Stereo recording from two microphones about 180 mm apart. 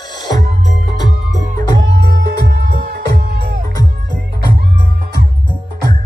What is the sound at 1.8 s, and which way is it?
Music, 70° right (ahead or behind).